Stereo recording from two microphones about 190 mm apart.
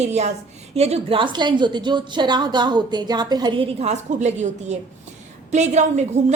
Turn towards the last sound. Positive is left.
turn(degrees=-35)  # may be behind; listen again after turning